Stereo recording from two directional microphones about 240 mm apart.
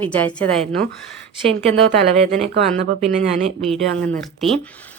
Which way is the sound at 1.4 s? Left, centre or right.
Right.